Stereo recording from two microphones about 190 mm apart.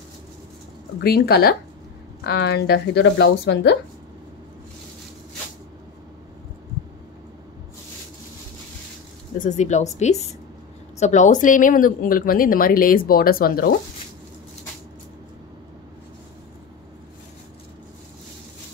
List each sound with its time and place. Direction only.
1.0 s speech: 55° left (ahead or behind)
9.4 s speech: 40° left (ahead or behind)